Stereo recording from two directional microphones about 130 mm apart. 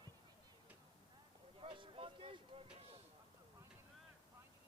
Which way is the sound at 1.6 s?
40° right (ahead or behind).